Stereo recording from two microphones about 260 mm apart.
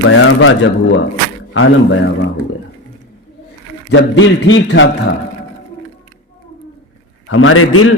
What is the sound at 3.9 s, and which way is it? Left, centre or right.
Speech, left.